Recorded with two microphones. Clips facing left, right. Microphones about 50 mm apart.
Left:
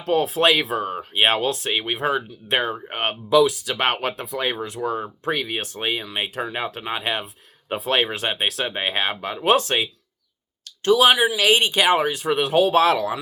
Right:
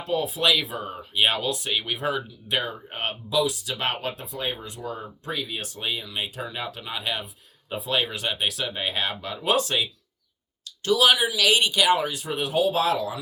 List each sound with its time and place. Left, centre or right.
0.0 s speech: left
0.9 s speech: left
1.7 s speech: left
2.5 s speech: left